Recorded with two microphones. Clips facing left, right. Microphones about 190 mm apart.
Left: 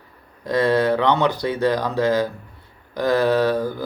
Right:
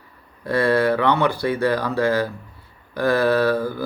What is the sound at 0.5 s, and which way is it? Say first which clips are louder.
Speech: even; 15° left (ahead or behind).